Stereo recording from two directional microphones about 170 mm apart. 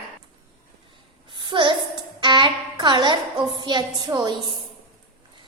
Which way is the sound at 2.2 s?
25° right (ahead or behind).